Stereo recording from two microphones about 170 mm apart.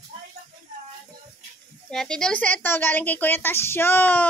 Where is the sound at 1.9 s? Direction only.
5° left (ahead or behind).